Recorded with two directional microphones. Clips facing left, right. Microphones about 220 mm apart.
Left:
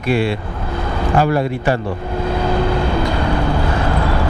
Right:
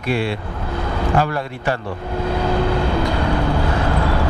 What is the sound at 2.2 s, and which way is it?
Vehicle, 15° left (ahead or behind).